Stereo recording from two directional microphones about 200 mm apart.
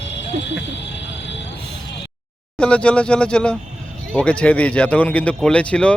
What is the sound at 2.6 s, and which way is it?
Speech, 5° left (ahead or behind).